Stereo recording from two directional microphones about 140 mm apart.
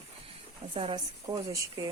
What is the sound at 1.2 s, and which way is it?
Speech, 25° right (ahead or behind).